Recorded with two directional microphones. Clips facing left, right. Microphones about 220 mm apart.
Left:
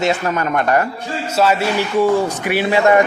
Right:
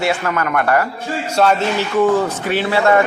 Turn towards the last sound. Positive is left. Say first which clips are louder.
# left 1 dB
turn(degrees=15)  # may be behind; listen again after turning